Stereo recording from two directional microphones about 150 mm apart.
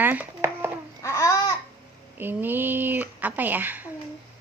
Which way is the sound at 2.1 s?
15° right (ahead or behind).